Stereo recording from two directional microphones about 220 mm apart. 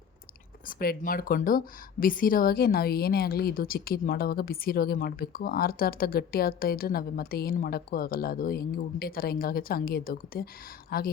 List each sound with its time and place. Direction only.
0.7 s speech: 40° left (ahead or behind)